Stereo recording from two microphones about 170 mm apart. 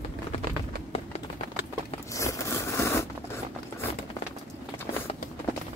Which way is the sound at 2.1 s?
15° left (ahead or behind).